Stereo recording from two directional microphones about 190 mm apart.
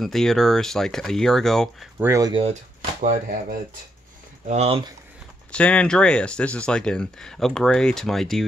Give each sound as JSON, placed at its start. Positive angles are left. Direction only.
{"t": 0.0, "sound": "speech", "side_deg": 0}
{"t": 2.0, "sound": "speech", "side_deg": -15}
{"t": 3.0, "sound": "speech", "side_deg": -40}
{"t": 4.5, "sound": "speech", "side_deg": -35}
{"t": 5.5, "sound": "speech", "side_deg": 5}